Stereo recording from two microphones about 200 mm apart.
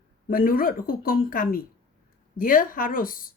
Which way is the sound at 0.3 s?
45° left (ahead or behind).